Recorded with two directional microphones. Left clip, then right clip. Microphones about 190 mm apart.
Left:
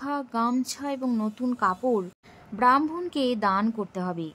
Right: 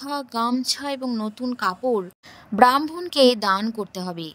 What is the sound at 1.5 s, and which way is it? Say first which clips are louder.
Speech: right 2 dB; 45° right (ahead or behind).